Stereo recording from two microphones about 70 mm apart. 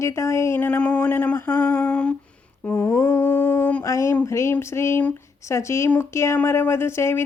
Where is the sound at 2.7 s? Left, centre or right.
Left.